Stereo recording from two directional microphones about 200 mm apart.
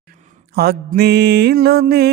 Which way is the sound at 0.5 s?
50° right (ahead or behind).